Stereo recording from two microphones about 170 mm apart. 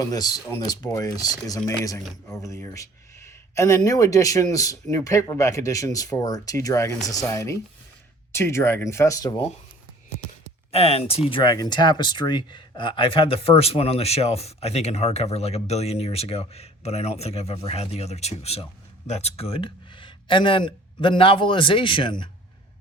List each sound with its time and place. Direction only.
0.0 s speech: 20° left (ahead or behind)
10.7 s speech: 35° left (ahead or behind)